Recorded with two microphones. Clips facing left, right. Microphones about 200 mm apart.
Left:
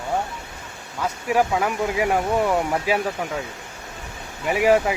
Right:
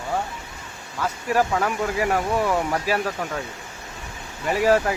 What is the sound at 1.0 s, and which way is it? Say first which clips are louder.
Speech: left 1 dB; 10° left (ahead or behind).